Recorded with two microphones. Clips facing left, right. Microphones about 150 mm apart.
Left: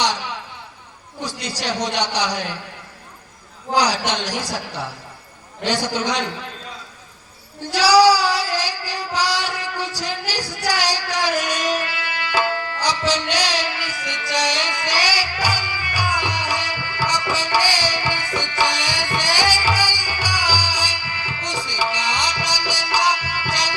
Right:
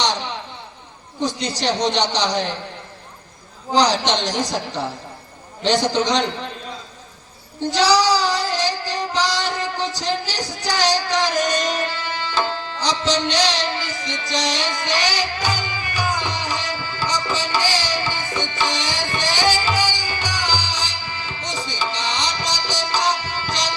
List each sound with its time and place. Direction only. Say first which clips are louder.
1.2 s a man's voice: right 5 dB; 10° left (ahead or behind)
3.8 s a man's voice: right 2 dB; 10° left (ahead or behind)
7.7 s a sound: left 3 dB; 10° left (ahead or behind)
18.5 s music: left 4 dB; 10° left (ahead or behind)